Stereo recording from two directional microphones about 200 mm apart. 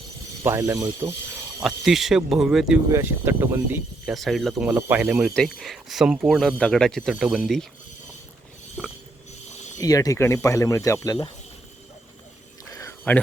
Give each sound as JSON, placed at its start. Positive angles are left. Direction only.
{"t": 0.4, "sound": "speech", "side_deg": -10}
{"t": 1.6, "sound": "speech", "side_deg": 0}
{"t": 9.7, "sound": "speech", "side_deg": 15}
{"t": 12.7, "sound": "a sound", "side_deg": 15}